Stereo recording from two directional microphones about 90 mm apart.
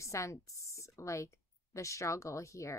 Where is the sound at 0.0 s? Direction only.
35° left (ahead or behind).